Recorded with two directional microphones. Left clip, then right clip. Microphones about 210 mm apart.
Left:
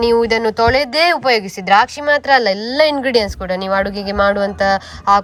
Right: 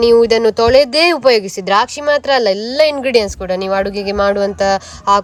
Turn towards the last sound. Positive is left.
turn(degrees=-15)  # may be behind; listen again after turning